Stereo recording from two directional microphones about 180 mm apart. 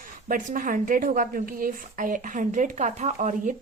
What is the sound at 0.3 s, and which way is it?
A woman's voice, 50° right (ahead or behind).